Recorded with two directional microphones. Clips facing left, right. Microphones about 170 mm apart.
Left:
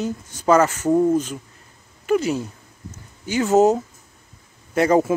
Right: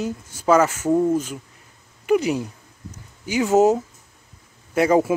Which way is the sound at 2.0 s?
15° right (ahead or behind).